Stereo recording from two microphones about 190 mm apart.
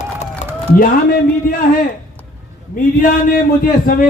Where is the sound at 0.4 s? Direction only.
35° left (ahead or behind).